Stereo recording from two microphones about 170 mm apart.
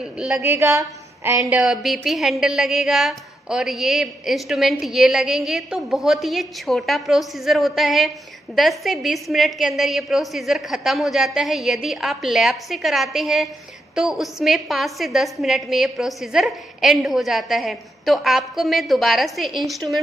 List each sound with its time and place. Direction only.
0.2 s a woman's voice: 5° right (ahead or behind)
0.5 s a woman's voice: 15° right (ahead or behind)
1.6 s a woman's voice: centre (ahead or behind)